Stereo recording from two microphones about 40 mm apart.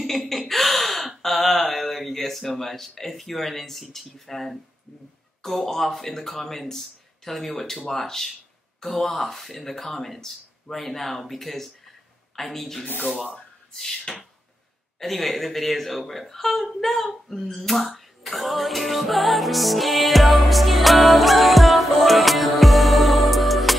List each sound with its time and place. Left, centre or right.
0.0 s gasp: centre
3.9 s speech: centre
15.0 s speech: centre